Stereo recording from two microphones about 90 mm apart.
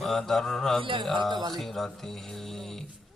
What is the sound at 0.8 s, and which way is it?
Music, 65° right (ahead or behind).